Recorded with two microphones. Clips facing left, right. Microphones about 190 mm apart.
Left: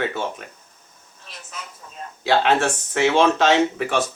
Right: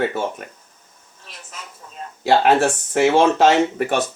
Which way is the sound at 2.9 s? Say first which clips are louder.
Right 2 dB; 50° right (ahead or behind).